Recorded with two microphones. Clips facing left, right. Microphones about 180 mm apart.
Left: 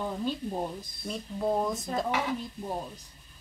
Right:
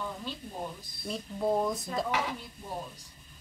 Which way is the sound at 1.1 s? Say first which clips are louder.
Even; centre (ahead or behind).